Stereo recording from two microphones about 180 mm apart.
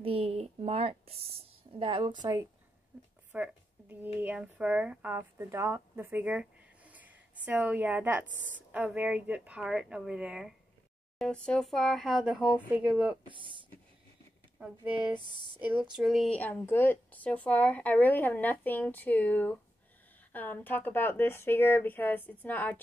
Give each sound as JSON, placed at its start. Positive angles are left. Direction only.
{"t": 0.0, "sound": "a sound", "side_deg": -30}
{"t": 3.3, "sound": "a sound", "side_deg": -10}
{"t": 4.2, "sound": "a woman's voice", "side_deg": -5}
{"t": 12.4, "sound": "speech", "side_deg": 10}
{"t": 12.7, "sound": "speech", "side_deg": -5}
{"t": 13.3, "sound": "speech", "side_deg": -25}
{"t": 14.6, "sound": "speech", "side_deg": -5}